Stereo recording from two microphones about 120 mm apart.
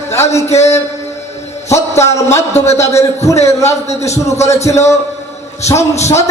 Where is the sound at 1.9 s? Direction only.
25° left (ahead or behind).